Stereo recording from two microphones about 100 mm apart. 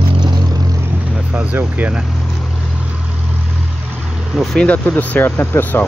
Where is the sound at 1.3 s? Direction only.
15° right (ahead or behind).